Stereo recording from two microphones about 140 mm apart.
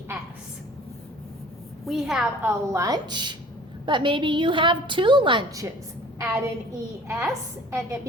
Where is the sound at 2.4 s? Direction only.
25° right (ahead or behind).